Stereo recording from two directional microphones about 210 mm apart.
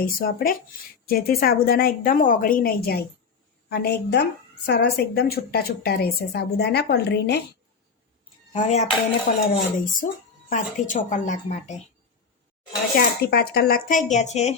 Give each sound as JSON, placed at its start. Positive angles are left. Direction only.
{"t": 0.0, "sound": "a woman's voice", "side_deg": 45}
{"t": 8.5, "sound": "speech", "side_deg": 35}
{"t": 13.0, "sound": "speech", "side_deg": 45}